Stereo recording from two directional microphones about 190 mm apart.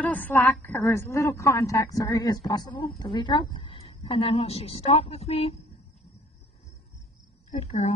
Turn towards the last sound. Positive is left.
turn(degrees=35)  # may be behind; listen again after turning